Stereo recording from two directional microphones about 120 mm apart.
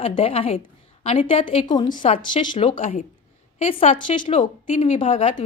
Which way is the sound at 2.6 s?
65° left (ahead or behind).